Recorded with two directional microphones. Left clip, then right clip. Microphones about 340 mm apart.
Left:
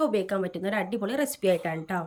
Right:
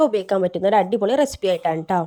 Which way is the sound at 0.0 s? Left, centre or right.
Centre.